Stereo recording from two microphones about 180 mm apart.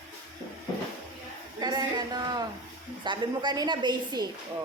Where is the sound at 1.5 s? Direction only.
20° right (ahead or behind).